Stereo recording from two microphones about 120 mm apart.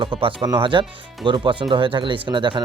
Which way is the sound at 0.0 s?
45° right (ahead or behind).